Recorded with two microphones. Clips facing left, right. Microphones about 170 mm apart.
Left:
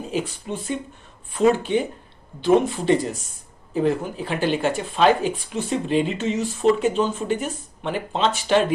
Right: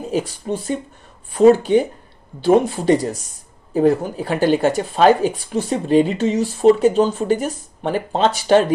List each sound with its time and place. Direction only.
0.1 s speech: 40° right (ahead or behind)